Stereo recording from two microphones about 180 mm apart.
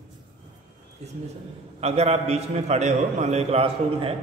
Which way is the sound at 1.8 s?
35° right (ahead or behind).